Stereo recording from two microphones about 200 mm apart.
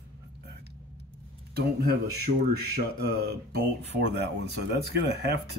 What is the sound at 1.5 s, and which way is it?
Speech, 50° right (ahead or behind).